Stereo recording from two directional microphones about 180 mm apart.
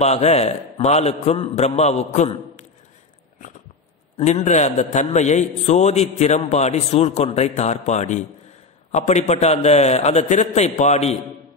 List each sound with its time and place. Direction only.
0.0 s a man's voice: 35° left (ahead or behind)
4.5 s a man's voice: 40° left (ahead or behind)